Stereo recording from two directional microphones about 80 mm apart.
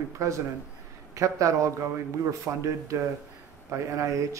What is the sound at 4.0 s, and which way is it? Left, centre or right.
Speech, right.